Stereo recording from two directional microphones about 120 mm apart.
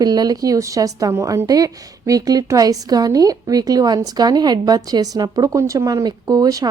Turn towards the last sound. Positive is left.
turn(degrees=-30)  # may be behind; listen again after turning